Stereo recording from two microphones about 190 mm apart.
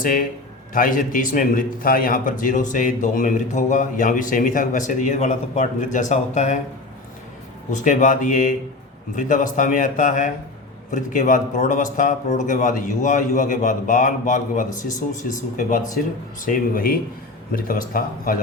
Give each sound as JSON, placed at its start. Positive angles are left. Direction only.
{"t": 0.0, "sound": "a man's voice", "side_deg": 45}
{"t": 7.7, "sound": "a man's voice", "side_deg": 40}